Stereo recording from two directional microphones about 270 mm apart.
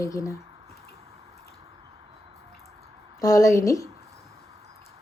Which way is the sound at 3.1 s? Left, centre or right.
Centre.